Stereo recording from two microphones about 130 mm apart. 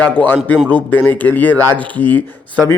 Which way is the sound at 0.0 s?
10° left (ahead or behind).